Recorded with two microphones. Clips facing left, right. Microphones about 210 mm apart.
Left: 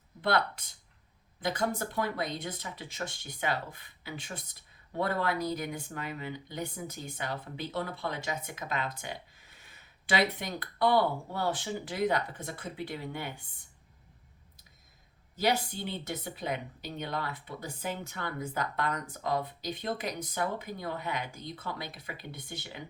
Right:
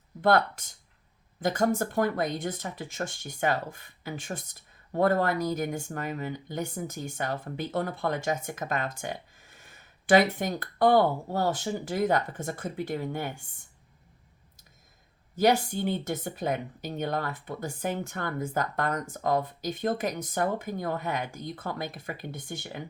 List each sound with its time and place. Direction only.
0.2 s speech: 45° right (ahead or behind)
15.4 s speech: 50° right (ahead or behind)